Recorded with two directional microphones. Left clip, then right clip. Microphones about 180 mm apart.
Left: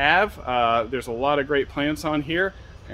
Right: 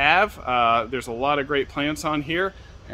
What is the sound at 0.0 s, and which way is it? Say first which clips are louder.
Speech: right 1 dB; 15° right (ahead or behind).